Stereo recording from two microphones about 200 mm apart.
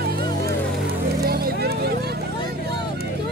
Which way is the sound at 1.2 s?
50° right (ahead or behind).